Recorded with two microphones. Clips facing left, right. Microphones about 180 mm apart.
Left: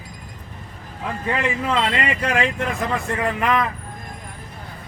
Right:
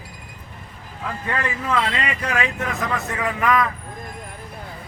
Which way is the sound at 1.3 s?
20° left (ahead or behind).